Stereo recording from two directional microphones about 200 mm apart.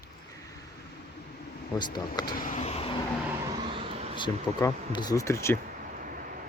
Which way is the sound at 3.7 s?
25° right (ahead or behind).